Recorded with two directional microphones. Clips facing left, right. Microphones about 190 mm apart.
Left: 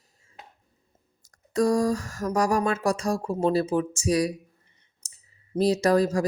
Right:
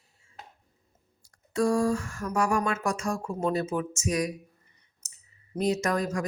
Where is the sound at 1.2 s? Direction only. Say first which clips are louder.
Left 3 dB; 40° left (ahead or behind).